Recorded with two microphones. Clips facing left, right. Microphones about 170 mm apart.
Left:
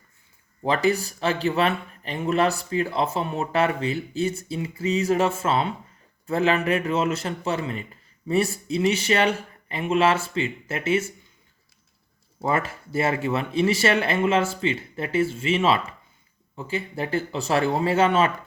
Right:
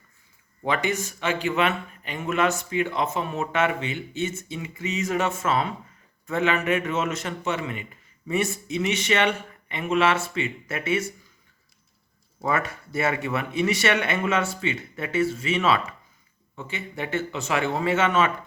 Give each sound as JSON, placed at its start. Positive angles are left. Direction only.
{"t": 0.6, "sound": "speech", "side_deg": 35}
{"t": 12.4, "sound": "speech", "side_deg": 30}